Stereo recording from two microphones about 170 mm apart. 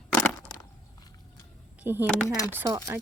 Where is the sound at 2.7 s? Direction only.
15° right (ahead or behind).